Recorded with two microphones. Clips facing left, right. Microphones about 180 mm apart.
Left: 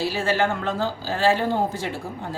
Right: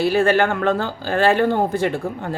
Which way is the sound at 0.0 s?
55° right (ahead or behind).